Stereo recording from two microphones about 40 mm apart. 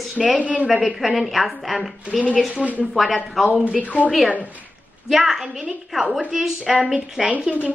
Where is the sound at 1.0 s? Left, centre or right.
Centre.